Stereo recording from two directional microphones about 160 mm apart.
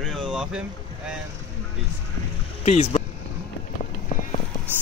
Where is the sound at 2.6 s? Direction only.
40° left (ahead or behind).